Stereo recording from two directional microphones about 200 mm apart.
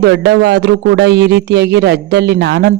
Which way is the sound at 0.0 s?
55° right (ahead or behind).